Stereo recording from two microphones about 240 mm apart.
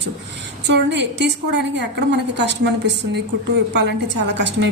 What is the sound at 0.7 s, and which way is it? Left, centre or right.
A woman's voice, right.